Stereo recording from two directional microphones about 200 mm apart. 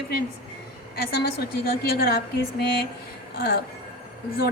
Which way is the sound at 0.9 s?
50° left (ahead or behind).